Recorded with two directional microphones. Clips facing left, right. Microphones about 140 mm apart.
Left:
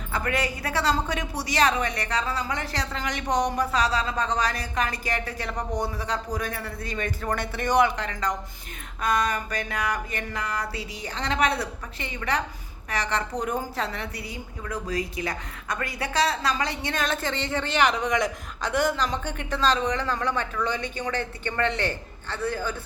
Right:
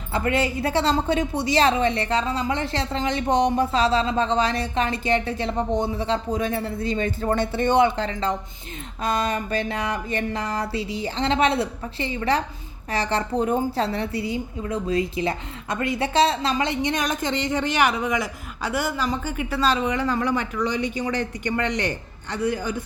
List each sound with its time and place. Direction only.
0.1 s a woman's voice: 25° right (ahead or behind)